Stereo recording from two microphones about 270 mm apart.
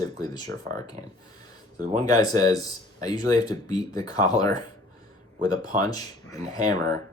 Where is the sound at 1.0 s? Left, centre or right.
Right.